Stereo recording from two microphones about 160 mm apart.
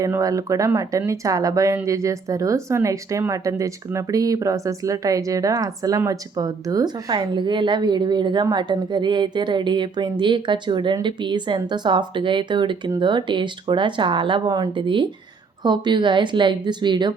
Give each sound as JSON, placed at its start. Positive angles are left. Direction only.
{"t": 0.0, "sound": "speech", "side_deg": -20}